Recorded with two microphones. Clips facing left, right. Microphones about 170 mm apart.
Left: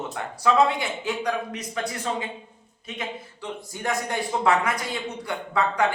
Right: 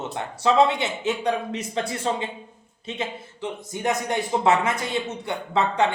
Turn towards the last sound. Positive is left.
turn(degrees=-25)  # may be behind; listen again after turning